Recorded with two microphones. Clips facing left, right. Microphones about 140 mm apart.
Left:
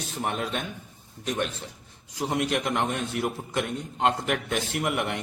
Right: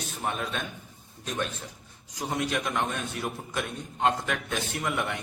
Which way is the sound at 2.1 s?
20° left (ahead or behind).